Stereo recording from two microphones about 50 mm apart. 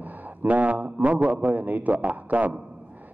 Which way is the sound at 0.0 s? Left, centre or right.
Right.